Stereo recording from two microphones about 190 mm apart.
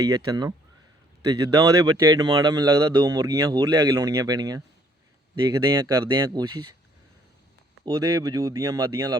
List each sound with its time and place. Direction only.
0.3 s speech: 20° right (ahead or behind)
7.9 s speech: 20° right (ahead or behind)